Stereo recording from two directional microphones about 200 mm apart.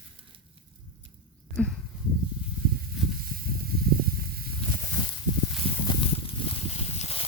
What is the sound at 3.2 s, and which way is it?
Snake, 45° right (ahead or behind).